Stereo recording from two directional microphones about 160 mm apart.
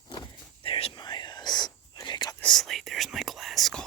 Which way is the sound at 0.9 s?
25° left (ahead or behind).